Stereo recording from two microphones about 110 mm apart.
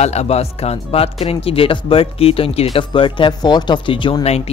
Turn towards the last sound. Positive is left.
turn(degrees=75)  # may be behind; listen again after turning